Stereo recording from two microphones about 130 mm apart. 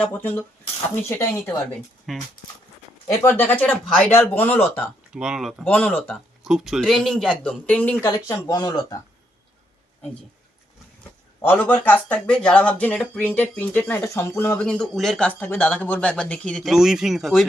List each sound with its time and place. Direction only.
0.0 s speech: 15° left (ahead or behind)
2.1 s speech: centre (ahead or behind)
3.1 s speech: 15° left (ahead or behind)
4.8 s speech: 5° right (ahead or behind)
5.6 s speech: 10° left (ahead or behind)
6.4 s speech: 5° right (ahead or behind)
8.0 s speech: 25° left (ahead or behind)
11.4 s speech: 15° left (ahead or behind)
15.3 s speech: 15° left (ahead or behind); by 17.4 s centre (ahead or behind)